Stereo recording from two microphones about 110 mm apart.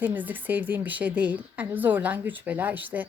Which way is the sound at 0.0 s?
15° right (ahead or behind).